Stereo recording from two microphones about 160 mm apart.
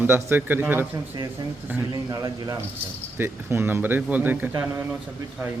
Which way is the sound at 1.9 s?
25° right (ahead or behind).